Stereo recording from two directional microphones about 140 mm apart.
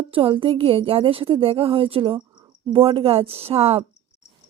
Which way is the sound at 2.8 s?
45° right (ahead or behind).